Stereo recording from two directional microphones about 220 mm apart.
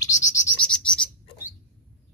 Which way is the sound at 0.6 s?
5° left (ahead or behind).